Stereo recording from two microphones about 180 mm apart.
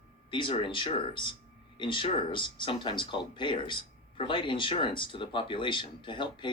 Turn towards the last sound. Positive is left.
turn(degrees=25)  # may be behind; listen again after turning